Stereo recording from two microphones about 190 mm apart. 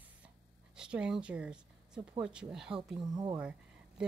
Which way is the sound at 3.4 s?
5° right (ahead or behind).